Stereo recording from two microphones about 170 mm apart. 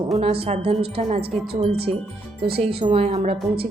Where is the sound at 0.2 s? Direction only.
35° right (ahead or behind).